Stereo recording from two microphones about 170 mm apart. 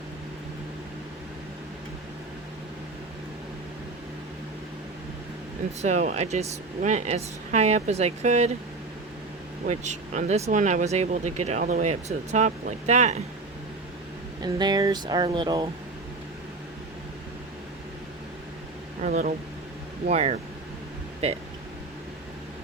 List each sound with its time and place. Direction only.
5.8 s speech: 45° right (ahead or behind)
9.6 s speech: 45° right (ahead or behind)
14.4 s speech: 25° right (ahead or behind)
19.0 s speech: 50° right (ahead or behind)
20.1 s speech: 40° right (ahead or behind)